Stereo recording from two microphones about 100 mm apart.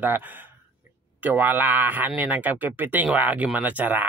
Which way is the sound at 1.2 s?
15° right (ahead or behind).